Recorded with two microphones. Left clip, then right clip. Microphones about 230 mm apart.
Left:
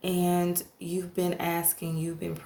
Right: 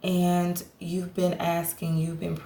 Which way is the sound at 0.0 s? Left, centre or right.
Left.